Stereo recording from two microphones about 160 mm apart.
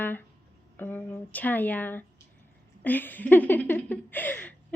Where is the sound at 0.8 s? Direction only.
10° left (ahead or behind).